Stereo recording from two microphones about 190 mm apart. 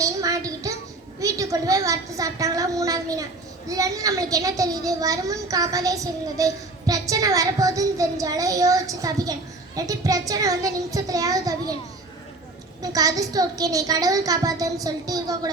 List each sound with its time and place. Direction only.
0.0 s a sound: 15° right (ahead or behind)
1.2 s a child's voice: 15° right (ahead or behind)
12.8 s a woman's voice: 20° right (ahead or behind)